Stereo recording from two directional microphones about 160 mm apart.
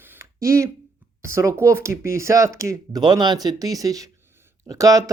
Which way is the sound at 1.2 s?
15° right (ahead or behind).